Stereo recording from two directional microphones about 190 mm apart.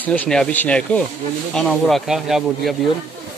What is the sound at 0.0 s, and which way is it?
Speech, 10° left (ahead or behind).